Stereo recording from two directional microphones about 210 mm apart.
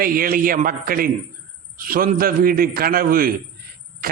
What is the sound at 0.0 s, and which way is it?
A man's voice, 45° right (ahead or behind).